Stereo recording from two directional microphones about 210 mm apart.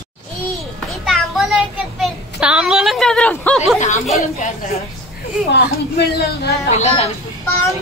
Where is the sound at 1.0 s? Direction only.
Centre (ahead or behind).